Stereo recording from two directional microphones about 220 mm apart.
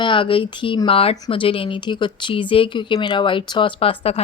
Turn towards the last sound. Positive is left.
turn(degrees=25)  # may be behind; listen again after turning